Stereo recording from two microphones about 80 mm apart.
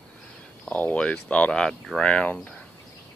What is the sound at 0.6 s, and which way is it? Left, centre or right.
Cricket, centre.